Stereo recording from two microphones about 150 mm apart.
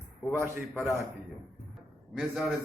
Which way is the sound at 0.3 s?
15° right (ahead or behind).